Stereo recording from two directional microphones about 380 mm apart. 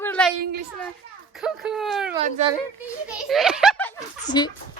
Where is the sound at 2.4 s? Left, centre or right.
Centre.